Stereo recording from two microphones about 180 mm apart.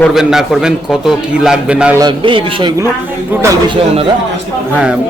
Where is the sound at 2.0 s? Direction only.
25° right (ahead or behind).